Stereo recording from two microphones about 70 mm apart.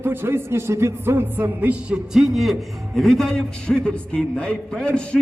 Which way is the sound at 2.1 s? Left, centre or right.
Centre.